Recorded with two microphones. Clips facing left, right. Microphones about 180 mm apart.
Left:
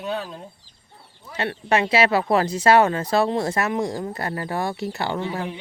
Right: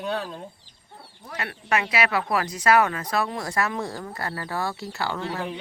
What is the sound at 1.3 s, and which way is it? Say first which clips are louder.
Speech: left 5 dB; 30° left (ahead or behind).